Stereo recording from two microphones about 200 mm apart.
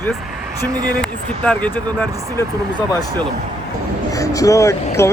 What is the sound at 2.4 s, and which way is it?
Speech, 20° left (ahead or behind).